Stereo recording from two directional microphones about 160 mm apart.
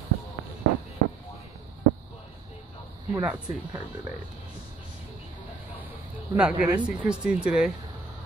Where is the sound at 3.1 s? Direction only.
10° right (ahead or behind).